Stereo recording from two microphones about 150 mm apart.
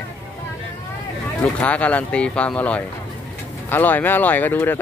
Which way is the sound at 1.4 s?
10° left (ahead or behind).